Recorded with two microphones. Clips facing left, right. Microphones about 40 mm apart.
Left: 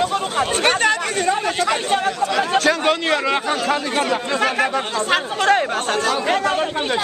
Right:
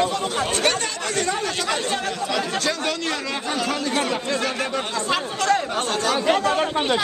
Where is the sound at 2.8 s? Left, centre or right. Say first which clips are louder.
Left 7 dB; left.